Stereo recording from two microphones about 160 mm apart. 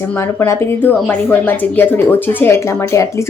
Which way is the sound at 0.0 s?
15° left (ahead or behind).